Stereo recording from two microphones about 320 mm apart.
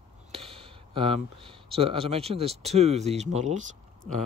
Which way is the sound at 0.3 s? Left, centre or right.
Centre.